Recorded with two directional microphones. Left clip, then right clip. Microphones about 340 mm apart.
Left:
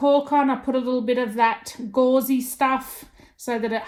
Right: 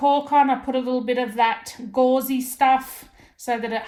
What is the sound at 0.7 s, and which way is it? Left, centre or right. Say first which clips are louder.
A woman's voice: left 1 dB; right.